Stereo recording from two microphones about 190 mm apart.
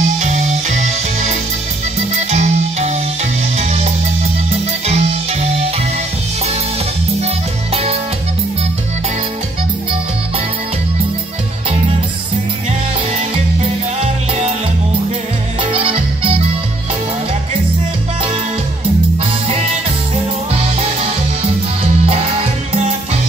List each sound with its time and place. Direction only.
0.0 s music: 40° right (ahead or behind)
2.3 s music: 35° right (ahead or behind)
13.6 s music: 35° right (ahead or behind)
15.7 s music: 30° right (ahead or behind)